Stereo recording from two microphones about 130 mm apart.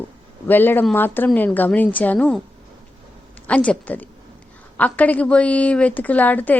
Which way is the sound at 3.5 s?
10° left (ahead or behind).